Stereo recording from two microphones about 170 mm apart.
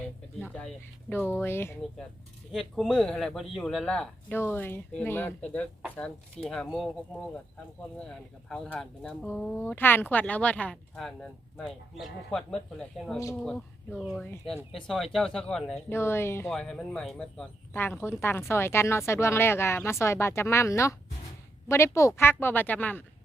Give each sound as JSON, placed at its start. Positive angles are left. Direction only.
{"t": 1.1, "sound": "speech", "side_deg": 10}
{"t": 2.5, "sound": "speech", "side_deg": 0}
{"t": 7.9, "sound": "speech", "side_deg": 5}
{"t": 15.9, "sound": "speech", "side_deg": 15}
{"t": 16.5, "sound": "speech", "side_deg": 5}